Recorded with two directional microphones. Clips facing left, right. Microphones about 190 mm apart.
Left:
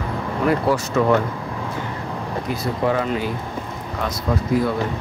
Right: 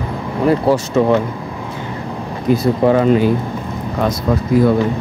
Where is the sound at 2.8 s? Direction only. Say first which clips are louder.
Right 7 dB; 30° right (ahead or behind).